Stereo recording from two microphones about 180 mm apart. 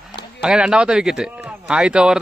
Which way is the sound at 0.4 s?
5° right (ahead or behind).